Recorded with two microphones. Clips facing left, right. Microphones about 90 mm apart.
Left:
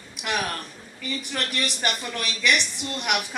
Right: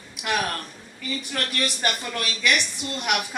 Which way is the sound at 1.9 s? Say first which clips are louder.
Right 1 dB; 5° right (ahead or behind).